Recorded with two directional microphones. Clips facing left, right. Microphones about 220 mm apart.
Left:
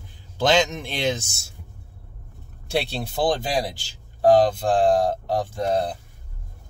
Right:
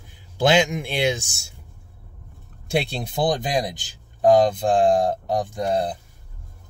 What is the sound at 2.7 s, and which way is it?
Speech, 15° right (ahead or behind).